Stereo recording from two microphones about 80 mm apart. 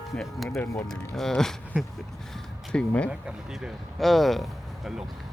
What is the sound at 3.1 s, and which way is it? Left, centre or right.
Speech, centre.